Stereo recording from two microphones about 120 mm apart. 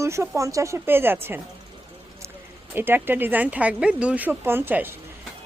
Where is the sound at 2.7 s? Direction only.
15° right (ahead or behind).